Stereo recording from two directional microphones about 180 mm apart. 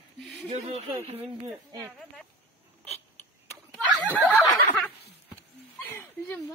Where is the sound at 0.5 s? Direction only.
35° right (ahead or behind).